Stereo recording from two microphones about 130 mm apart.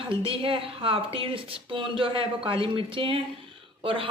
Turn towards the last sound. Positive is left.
turn(degrees=-45)  # may be behind; listen again after turning